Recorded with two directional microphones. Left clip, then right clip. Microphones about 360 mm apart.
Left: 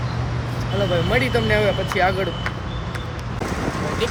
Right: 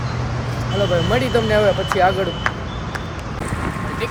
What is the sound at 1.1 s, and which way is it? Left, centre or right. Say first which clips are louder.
Speech: right 2 dB; centre.